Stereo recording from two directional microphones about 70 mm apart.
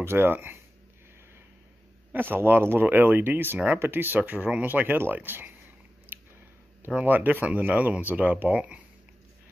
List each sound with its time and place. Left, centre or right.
0.0 s speech: right
2.1 s speech: right
6.1 s a sound: right
6.9 s speech: right